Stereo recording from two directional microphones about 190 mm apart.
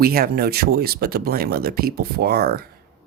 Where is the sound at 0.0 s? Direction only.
50° right (ahead or behind).